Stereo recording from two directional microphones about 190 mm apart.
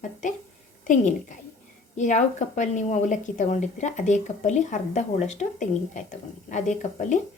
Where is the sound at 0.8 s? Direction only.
40° left (ahead or behind).